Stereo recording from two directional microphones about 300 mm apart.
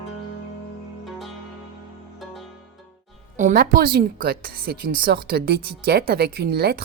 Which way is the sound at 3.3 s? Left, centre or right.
Right.